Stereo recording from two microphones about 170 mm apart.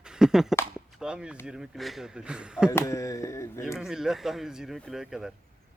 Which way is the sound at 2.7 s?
15° left (ahead or behind).